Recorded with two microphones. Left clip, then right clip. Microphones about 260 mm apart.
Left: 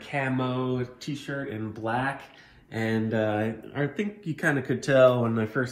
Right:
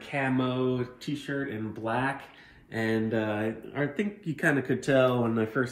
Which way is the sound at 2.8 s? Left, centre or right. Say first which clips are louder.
Left 1 dB; left.